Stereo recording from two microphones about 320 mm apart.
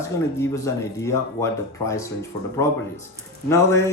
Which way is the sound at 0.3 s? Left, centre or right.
Centre.